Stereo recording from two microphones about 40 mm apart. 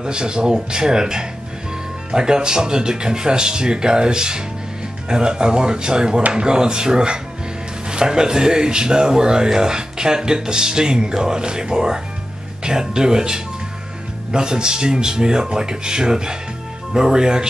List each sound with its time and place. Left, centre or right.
0.0 s speech: right